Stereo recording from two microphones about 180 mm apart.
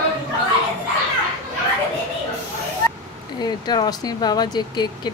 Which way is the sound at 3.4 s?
25° left (ahead or behind).